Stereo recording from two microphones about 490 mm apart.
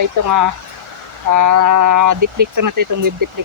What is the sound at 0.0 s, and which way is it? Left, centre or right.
Speech, right.